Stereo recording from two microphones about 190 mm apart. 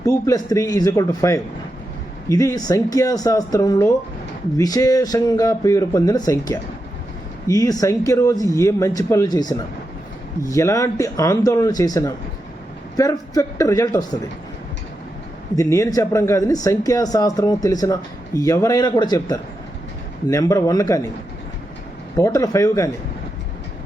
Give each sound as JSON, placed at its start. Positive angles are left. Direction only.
{"t": 0.0, "sound": "speech", "side_deg": 15}
{"t": 15.5, "sound": "speech", "side_deg": 15}
{"t": 22.2, "sound": "speech", "side_deg": 15}